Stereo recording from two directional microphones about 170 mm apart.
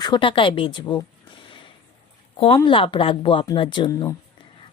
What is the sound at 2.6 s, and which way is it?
A woman's voice, 30° left (ahead or behind).